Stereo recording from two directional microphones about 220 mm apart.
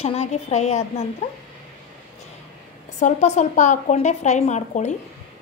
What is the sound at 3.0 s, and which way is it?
A woman's voice, 30° left (ahead or behind).